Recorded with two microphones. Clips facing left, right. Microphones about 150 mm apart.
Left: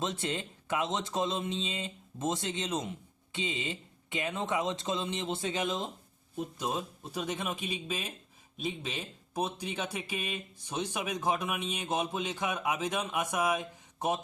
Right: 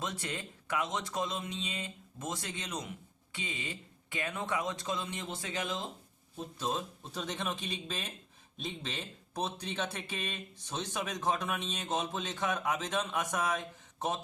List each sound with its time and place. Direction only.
0.0 s speech: 25° left (ahead or behind)